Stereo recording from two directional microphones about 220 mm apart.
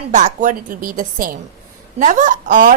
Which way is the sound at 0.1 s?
35° right (ahead or behind).